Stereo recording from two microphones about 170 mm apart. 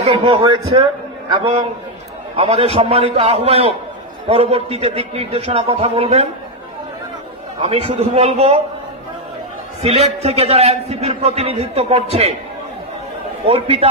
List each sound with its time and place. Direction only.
0.0 s a man's voice: 35° right (ahead or behind)
7.6 s a man's voice: 35° right (ahead or behind)
9.8 s a man's voice: 40° right (ahead or behind)
13.5 s a man's voice: 35° right (ahead or behind)